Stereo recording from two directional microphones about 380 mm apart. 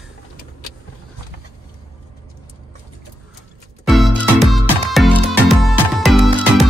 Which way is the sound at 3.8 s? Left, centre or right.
Centre.